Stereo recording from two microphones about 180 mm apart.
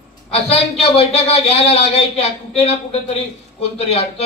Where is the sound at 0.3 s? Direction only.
35° left (ahead or behind).